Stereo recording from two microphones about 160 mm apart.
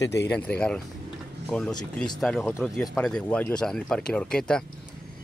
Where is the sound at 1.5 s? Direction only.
5° left (ahead or behind).